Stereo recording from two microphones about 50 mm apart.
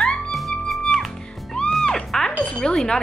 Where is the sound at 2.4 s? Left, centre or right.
Left.